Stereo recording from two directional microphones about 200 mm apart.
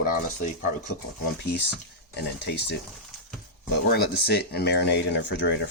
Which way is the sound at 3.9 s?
55° left (ahead or behind).